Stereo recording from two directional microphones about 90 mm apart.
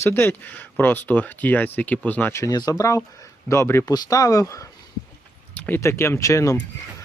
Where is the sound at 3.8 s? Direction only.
45° left (ahead or behind).